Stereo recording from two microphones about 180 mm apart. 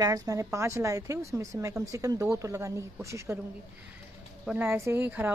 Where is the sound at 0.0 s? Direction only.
20° right (ahead or behind).